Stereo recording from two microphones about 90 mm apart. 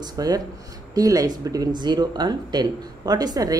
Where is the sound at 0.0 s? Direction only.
45° right (ahead or behind).